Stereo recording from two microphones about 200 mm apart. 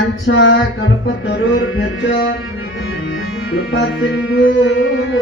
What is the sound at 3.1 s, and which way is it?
Music, 55° left (ahead or behind).